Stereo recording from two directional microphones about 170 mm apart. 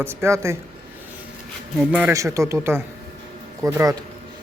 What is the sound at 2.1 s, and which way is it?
Speech, 20° right (ahead or behind).